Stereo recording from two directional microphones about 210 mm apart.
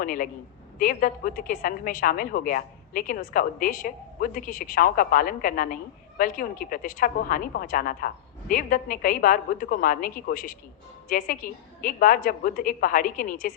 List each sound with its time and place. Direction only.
0.0 s a woman's voice: 40° left (ahead or behind)